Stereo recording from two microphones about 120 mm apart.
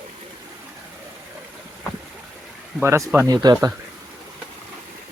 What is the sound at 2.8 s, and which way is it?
Speech, 25° right (ahead or behind).